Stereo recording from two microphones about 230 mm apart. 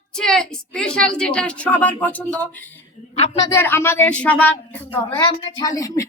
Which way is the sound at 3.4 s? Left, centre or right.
Centre.